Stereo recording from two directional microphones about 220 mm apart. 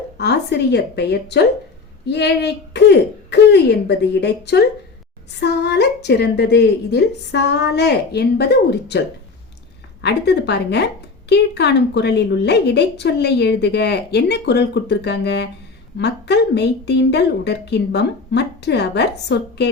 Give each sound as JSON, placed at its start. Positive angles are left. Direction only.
{"t": 0.2, "sound": "a woman's voice", "side_deg": 50}